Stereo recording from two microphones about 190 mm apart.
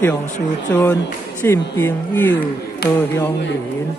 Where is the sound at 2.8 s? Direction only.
55° left (ahead or behind).